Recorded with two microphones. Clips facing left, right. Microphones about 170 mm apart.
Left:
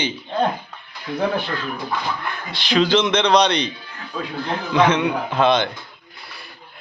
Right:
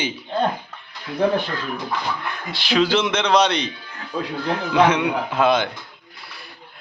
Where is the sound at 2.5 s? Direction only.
5° right (ahead or behind).